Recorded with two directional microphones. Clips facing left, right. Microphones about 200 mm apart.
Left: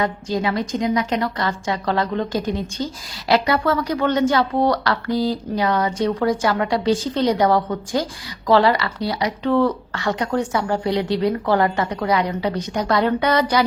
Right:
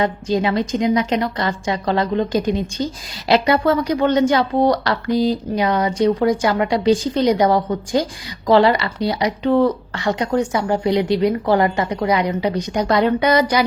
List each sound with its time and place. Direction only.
0.0 s a woman's voice: 25° right (ahead or behind)